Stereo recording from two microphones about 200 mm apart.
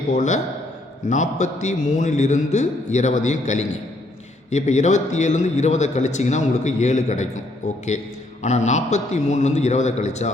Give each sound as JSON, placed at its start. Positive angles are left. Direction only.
{"t": 0.1, "sound": "a man's voice", "side_deg": 35}